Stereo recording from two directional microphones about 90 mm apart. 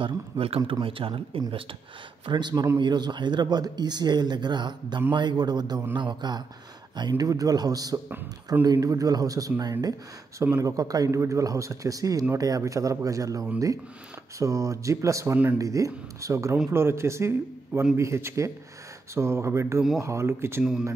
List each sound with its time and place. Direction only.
0.0 s speech: 90° right
2.2 s a man's voice: 55° right (ahead or behind); by 20.6 s 25° right (ahead or behind)